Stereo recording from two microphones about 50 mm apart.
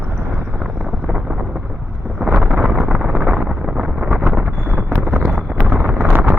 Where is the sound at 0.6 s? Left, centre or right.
Centre.